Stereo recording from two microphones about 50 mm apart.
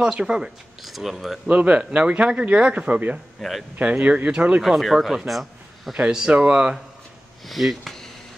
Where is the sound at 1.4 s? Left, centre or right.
Right.